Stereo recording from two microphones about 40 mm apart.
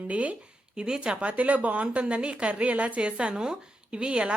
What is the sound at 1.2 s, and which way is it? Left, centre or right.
Speech, right.